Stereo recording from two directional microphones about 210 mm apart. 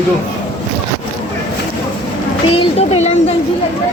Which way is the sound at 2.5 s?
25° left (ahead or behind).